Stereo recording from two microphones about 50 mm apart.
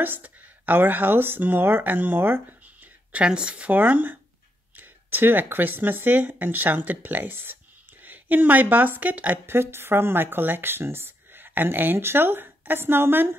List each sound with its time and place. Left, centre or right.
0.0 s speech: right
3.3 s speech: centre
3.7 s speech: right
9.5 s speech: right